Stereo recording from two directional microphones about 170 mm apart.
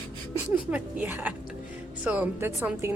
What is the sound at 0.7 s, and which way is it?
A woman's voice, 10° right (ahead or behind).